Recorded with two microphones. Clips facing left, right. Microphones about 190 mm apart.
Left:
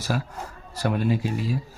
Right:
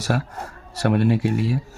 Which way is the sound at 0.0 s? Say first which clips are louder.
Right 4 dB; 70° right (ahead or behind).